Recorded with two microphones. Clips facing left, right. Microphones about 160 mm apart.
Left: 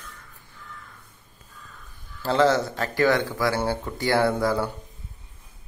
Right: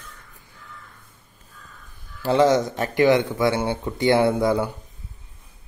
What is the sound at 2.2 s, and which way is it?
Speech, 15° right (ahead or behind).